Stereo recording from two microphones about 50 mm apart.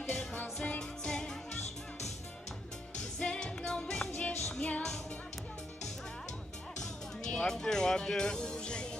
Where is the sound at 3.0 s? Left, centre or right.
Centre.